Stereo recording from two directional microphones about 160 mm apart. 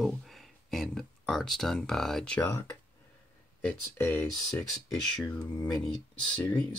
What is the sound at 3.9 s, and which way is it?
Speech, 15° left (ahead or behind).